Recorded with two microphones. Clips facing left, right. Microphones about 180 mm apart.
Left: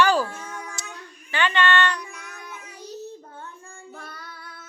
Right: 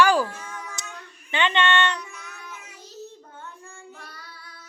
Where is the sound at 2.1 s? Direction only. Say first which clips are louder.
Left 1 dB; 55° left (ahead or behind).